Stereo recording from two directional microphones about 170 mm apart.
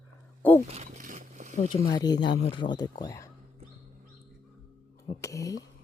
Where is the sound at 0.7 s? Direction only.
40° right (ahead or behind).